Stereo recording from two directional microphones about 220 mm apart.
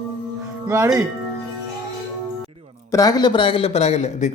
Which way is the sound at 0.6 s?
15° right (ahead or behind).